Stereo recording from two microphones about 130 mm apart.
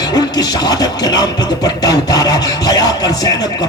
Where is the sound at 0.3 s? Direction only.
30° left (ahead or behind).